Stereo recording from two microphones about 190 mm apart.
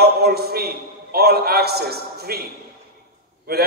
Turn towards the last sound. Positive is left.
turn(degrees=-55)  # may be behind; listen again after turning